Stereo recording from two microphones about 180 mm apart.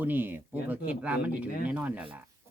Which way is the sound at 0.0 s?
10° right (ahead or behind).